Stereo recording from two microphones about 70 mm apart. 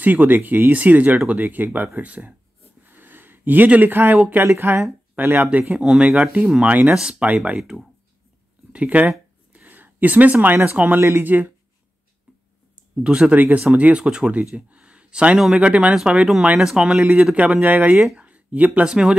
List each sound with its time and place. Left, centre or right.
0.0 s speech: right
2.9 s a sound: right
4.5 s speech: right; by 7.2 s centre
8.7 s speech: right
9.5 s a sound: right
10.3 s speech: right
11.0 s speech: right
11.2 s speech: right
13.0 s speech: centre
13.3 s speech: right
14.7 s a sound: centre
15.6 s speech: centre
18.1 s a sound: centre
18.9 s speech: centre